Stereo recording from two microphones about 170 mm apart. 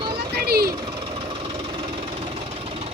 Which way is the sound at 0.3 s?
65° right (ahead or behind).